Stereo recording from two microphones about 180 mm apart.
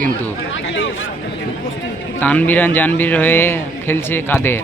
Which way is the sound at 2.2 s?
10° left (ahead or behind).